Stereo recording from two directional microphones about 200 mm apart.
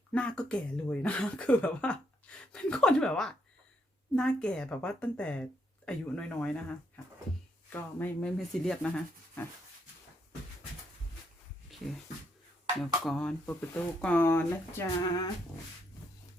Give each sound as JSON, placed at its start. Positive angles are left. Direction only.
{"t": 0.1, "sound": "speech", "side_deg": 5}
{"t": 11.7, "sound": "a sound", "side_deg": 0}
{"t": 12.8, "sound": "speech", "side_deg": 5}